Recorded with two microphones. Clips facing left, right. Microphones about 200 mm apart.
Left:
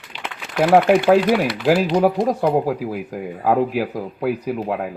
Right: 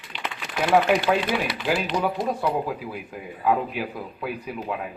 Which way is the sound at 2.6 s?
75° left (ahead or behind).